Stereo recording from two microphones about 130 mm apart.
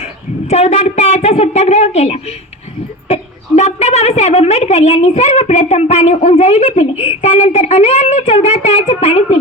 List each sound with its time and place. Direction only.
0.0 s a woman's voice: 55° left (ahead or behind)